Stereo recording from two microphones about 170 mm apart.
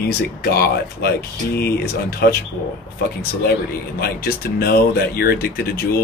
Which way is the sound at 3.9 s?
65° left (ahead or behind).